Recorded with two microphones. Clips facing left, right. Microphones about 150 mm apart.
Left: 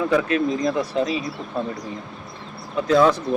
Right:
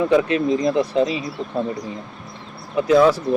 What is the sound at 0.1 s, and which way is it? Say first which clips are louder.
Speech: right 3 dB; 20° right (ahead or behind).